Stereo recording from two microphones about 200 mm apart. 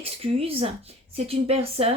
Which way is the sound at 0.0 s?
30° right (ahead or behind).